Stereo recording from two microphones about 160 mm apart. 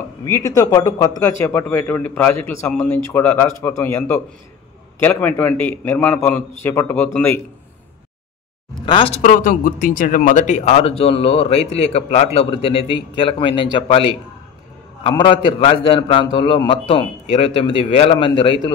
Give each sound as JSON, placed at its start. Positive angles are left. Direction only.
{"t": 0.2, "sound": "a man's voice", "side_deg": 20}
{"t": 8.8, "sound": "speech", "side_deg": 35}
{"t": 9.2, "sound": "speech", "side_deg": 55}